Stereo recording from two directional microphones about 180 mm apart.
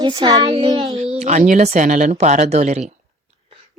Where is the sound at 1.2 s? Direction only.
40° right (ahead or behind).